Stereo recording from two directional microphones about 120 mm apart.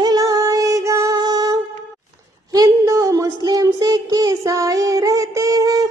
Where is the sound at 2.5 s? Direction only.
30° right (ahead or behind).